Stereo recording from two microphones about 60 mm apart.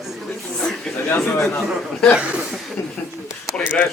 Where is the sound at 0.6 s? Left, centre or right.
Centre.